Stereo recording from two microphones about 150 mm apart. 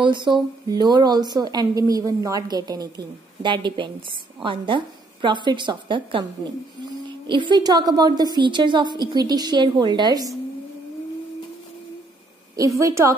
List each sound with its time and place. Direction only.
0.0 s a woman's voice: 30° right (ahead or behind)
12.5 s a woman's voice: 20° right (ahead or behind)